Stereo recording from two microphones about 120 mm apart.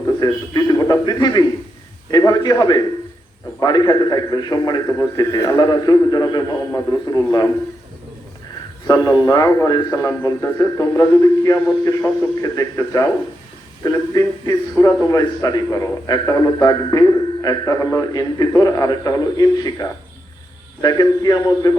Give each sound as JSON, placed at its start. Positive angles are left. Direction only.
{"t": 0.2, "sound": "a man's voice", "side_deg": 30}
{"t": 8.9, "sound": "a man's voice", "side_deg": 30}